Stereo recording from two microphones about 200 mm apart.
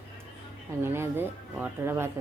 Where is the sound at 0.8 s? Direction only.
10° right (ahead or behind).